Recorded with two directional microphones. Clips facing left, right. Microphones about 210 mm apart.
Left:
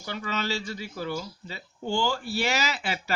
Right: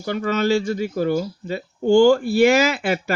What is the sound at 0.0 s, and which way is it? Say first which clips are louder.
Speech: right 11 dB; 50° right (ahead or behind).